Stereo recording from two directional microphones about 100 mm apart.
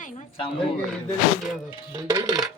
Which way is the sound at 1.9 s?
40° right (ahead or behind).